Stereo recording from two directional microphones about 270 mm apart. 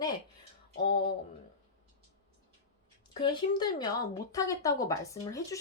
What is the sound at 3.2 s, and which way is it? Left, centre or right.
A woman's voice, centre.